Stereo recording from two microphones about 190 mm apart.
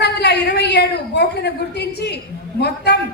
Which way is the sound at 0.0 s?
60° left (ahead or behind).